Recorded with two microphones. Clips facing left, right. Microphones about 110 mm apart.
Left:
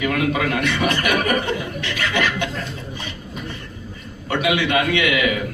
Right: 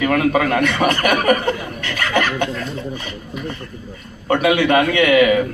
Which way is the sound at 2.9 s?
40° right (ahead or behind).